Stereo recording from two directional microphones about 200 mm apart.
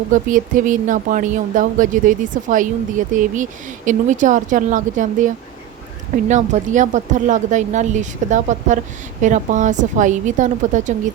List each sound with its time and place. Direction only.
0.1 s speech: 40° right (ahead or behind)